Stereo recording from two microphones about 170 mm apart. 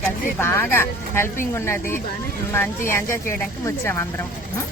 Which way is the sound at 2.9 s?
15° left (ahead or behind).